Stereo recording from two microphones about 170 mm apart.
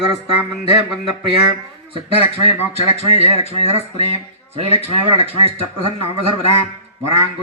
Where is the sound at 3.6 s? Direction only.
40° left (ahead or behind).